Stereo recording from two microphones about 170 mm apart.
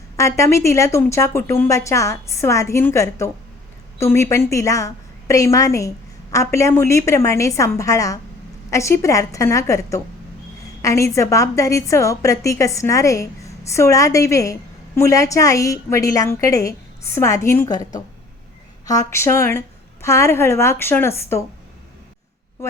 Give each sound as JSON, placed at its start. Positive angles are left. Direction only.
{"t": 0.2, "sound": "a woman's voice", "side_deg": 15}